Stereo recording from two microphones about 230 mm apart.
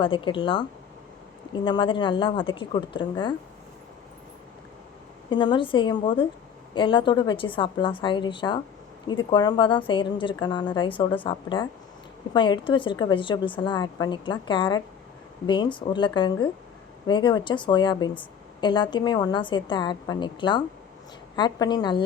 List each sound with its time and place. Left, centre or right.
0.0 s a woman's voice: left
5.3 s a woman's voice: left